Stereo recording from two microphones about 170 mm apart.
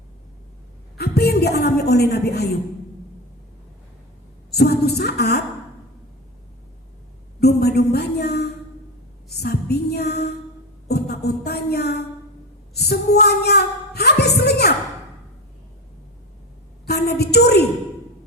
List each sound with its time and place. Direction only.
0.9 s a woman's voice: 70° left (ahead or behind)
4.5 s a woman's voice: 70° left (ahead or behind)
7.3 s a woman's voice: 70° left (ahead or behind)
10.8 s music: 70° left (ahead or behind)
12.7 s a woman's voice: 70° left (ahead or behind)
16.8 s a woman's voice: 70° left (ahead or behind)